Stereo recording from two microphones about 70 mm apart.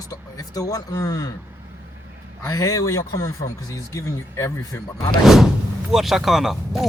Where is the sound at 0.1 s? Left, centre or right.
Left.